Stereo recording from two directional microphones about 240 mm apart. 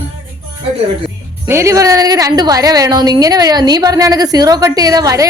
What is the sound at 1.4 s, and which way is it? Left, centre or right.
A woman's voice, centre.